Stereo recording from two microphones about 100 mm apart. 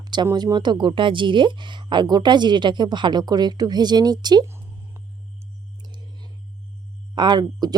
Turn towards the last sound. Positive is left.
turn(degrees=-45)  # may be behind; listen again after turning